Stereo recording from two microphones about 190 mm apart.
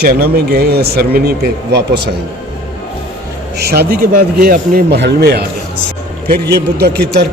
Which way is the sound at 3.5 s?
55° right (ahead or behind).